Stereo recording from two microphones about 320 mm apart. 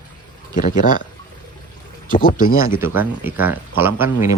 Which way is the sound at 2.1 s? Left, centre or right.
Left.